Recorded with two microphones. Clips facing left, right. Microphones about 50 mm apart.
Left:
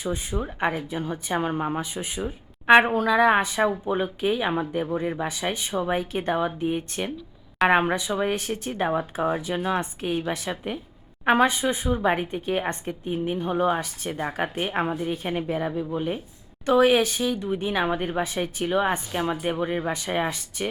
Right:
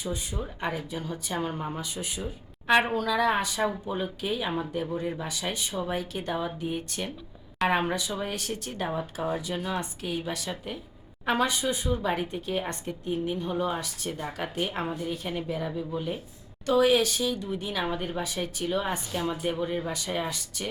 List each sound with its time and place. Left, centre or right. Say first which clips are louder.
0.0 s speech: left 5 dB; left